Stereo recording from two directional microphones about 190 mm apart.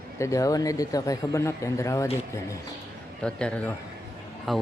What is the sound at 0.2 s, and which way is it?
Speech, 15° left (ahead or behind).